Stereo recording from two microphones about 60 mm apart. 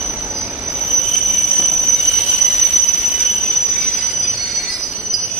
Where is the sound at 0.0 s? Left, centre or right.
Right.